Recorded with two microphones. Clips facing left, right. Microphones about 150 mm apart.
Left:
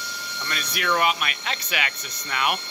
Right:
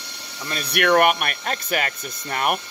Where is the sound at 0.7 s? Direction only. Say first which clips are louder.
Right 7 dB; 60° right (ahead or behind); by 2.6 s 45° right (ahead or behind).